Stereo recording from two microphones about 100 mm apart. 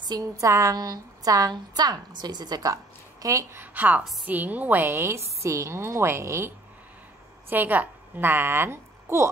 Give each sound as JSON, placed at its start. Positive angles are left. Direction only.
{"t": 0.1, "sound": "a woman's voice", "side_deg": -35}
{"t": 3.7, "sound": "a woman's voice", "side_deg": -15}